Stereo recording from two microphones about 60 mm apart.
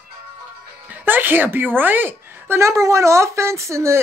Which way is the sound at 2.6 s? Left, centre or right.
Right.